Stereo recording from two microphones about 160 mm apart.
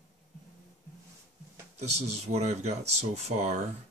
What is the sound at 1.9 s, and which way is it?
Speech, 45° right (ahead or behind).